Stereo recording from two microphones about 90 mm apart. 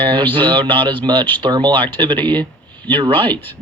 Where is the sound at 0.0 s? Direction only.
65° right (ahead or behind).